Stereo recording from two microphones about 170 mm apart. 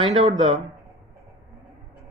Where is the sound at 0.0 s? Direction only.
35° right (ahead or behind).